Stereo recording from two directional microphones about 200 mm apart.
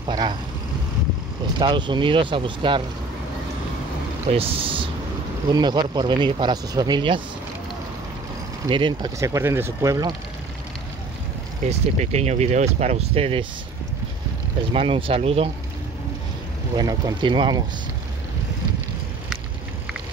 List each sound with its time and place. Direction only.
0.0 s speech: 20° right (ahead or behind)
1.6 s speech: 25° right (ahead or behind)
4.3 s speech: 30° right (ahead or behind)
8.6 s speech: 25° right (ahead or behind)
11.7 s speech: 35° right (ahead or behind)
14.7 s speech: 25° right (ahead or behind)
16.7 s speech: 20° right (ahead or behind)